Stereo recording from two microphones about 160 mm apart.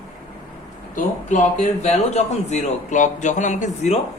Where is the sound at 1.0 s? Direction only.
50° left (ahead or behind).